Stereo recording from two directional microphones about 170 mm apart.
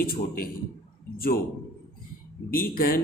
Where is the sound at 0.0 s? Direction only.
60° left (ahead or behind).